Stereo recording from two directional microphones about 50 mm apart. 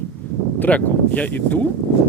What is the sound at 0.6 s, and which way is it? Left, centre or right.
Speech, left.